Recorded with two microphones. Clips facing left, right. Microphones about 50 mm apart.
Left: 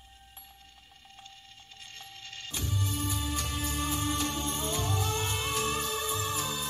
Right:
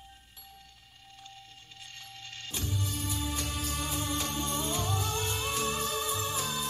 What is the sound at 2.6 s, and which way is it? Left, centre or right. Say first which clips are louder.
Music: left 2 dB; left.